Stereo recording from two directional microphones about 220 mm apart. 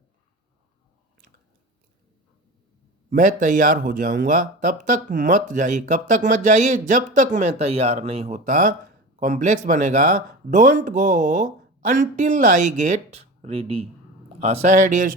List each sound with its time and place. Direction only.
3.1 s speech: 35° right (ahead or behind)
14.3 s speech: 30° right (ahead or behind)